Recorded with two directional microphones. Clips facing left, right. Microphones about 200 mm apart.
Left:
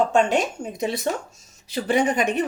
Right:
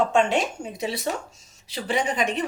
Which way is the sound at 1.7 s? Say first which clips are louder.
Left 4 dB; 50° left (ahead or behind).